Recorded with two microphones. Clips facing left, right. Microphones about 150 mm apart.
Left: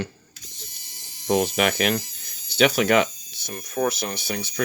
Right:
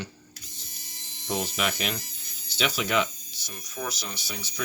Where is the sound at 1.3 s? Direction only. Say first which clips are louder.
Left 8 dB; 60° left (ahead or behind).